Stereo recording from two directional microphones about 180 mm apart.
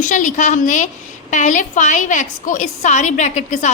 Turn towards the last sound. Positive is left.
turn(degrees=40)  # may be behind; listen again after turning